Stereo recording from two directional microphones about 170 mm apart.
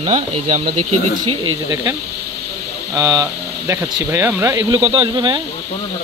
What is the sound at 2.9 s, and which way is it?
Speech, 20° right (ahead or behind).